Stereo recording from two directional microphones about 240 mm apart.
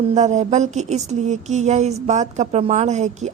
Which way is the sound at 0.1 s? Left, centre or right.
Right.